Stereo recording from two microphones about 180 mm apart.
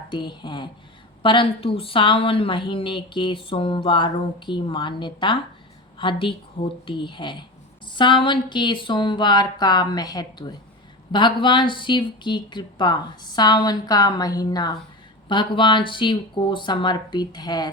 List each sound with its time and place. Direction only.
0.1 s a woman's voice: 25° left (ahead or behind)